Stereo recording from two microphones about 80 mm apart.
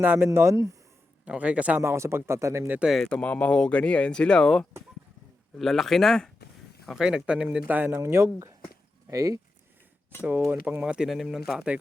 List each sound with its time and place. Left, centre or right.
0.0 s speech: right
0.3 s speech: right
1.2 s speech: centre
1.8 s speech: right
3.0 s speech: centre
6.8 s speech: centre
7.8 s speech: right
9.0 s speech: right
10.2 s speech: right
11.1 s speech: centre